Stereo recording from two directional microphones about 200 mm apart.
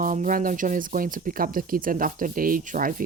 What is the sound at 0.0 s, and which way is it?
Speech, 40° right (ahead or behind).